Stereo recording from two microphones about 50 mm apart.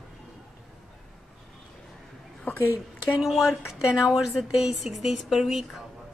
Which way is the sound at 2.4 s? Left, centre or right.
Left.